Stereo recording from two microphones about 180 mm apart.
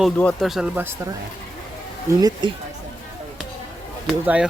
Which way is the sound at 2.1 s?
20° right (ahead or behind).